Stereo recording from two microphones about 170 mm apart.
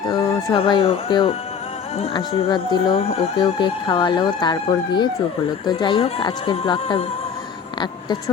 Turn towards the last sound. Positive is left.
turn(degrees=30)  # may be behind; listen again after turning